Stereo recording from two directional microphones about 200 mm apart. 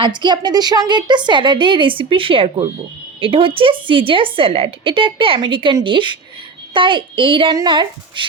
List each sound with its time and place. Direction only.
0.0 s a woman's voice: 20° right (ahead or behind)